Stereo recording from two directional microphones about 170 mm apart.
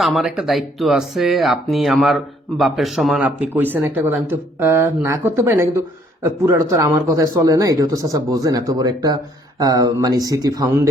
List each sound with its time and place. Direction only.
0.0 s speech: centre (ahead or behind); by 10.8 s 20° right (ahead or behind)